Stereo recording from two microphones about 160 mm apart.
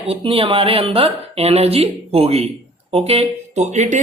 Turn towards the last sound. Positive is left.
turn(degrees=-45)  # may be behind; listen again after turning